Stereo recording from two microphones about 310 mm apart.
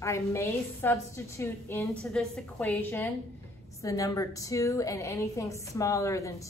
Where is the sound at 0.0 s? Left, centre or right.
Centre.